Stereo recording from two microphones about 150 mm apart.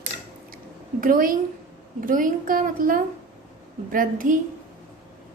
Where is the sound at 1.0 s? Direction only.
65° right (ahead or behind).